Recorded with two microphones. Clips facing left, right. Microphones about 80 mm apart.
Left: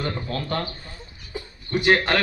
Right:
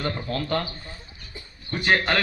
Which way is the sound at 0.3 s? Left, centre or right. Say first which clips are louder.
Right 1 dB; left.